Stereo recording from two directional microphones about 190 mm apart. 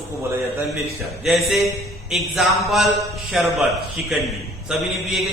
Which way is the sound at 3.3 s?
Centre (ahead or behind).